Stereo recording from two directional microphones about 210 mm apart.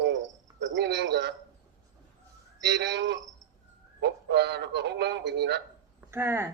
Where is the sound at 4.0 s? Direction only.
55° right (ahead or behind).